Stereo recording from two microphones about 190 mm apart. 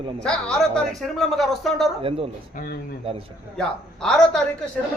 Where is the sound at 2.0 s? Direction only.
30° right (ahead or behind).